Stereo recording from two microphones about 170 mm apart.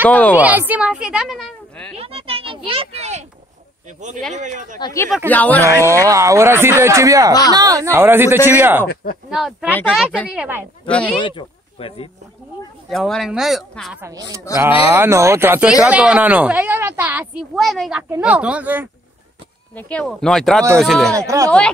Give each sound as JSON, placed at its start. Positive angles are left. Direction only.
{"t": 0.1, "sound": "speech", "side_deg": 10}
{"t": 0.4, "sound": "speech", "side_deg": -10}
{"t": 2.0, "sound": "a sound", "side_deg": -35}
{"t": 4.3, "sound": "speech", "side_deg": -45}
{"t": 4.7, "sound": "speech", "side_deg": 20}
{"t": 5.3, "sound": "speech", "side_deg": 10}
{"t": 5.6, "sound": "speech", "side_deg": -15}
{"t": 10.9, "sound": "speech", "side_deg": 5}
{"t": 11.2, "sound": "speech", "side_deg": 30}
{"t": 12.9, "sound": "speech", "side_deg": 0}
{"t": 14.0, "sound": "a man's voice", "side_deg": -20}
{"t": 19.7, "sound": "speech", "side_deg": 10}
{"t": 21.1, "sound": "a man's voice", "side_deg": -20}
{"t": 21.5, "sound": "speech", "side_deg": 5}